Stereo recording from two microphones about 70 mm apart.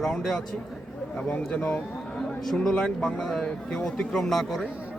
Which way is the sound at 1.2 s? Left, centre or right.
Centre.